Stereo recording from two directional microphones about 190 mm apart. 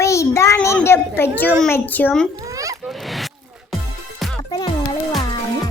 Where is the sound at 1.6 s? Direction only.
10° left (ahead or behind).